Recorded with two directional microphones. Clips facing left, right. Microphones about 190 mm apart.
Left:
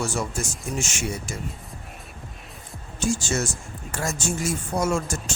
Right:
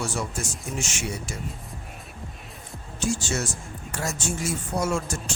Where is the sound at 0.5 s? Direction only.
45° left (ahead or behind).